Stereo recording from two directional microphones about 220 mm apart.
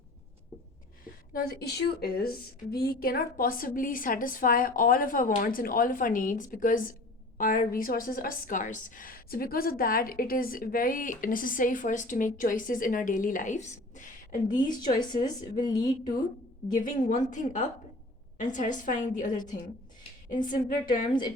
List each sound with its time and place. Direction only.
1.0 s a woman's voice: 40° left (ahead or behind)
14.4 s a woman's voice: 20° left (ahead or behind)
16.7 s a woman's voice: 35° left (ahead or behind)
21.1 s a woman's voice: 20° left (ahead or behind)